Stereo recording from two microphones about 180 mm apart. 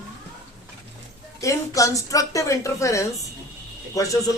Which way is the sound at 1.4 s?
20° left (ahead or behind).